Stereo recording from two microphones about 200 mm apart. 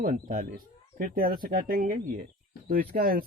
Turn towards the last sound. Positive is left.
turn(degrees=-45)  # may be behind; listen again after turning